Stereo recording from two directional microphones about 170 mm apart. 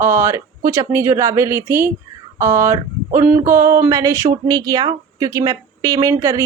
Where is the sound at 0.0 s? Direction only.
15° right (ahead or behind).